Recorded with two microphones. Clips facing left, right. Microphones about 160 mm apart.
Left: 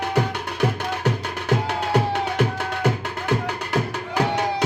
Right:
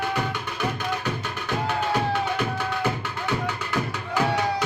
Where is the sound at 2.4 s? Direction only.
80° left.